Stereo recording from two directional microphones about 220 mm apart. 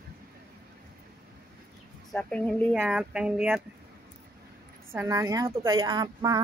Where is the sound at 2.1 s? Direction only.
5° left (ahead or behind).